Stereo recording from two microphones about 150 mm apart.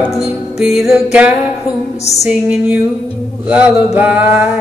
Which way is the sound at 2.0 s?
45° left (ahead or behind).